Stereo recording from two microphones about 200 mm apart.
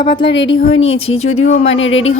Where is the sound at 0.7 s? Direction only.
80° left.